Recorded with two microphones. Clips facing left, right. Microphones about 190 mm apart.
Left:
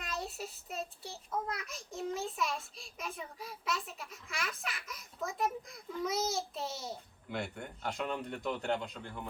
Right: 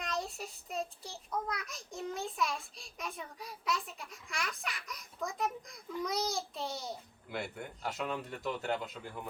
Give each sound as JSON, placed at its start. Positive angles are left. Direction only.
{"t": 0.0, "sound": "child singing", "side_deg": 5}